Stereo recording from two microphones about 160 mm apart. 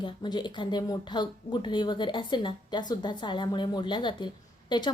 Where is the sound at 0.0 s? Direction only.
30° left (ahead or behind).